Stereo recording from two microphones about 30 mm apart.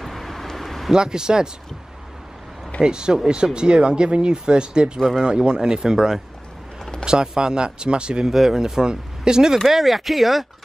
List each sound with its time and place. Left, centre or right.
0.0 s vehicle: centre
0.9 s speech: right
2.8 s speech: right
8.3 s speech: centre
9.7 s speech: centre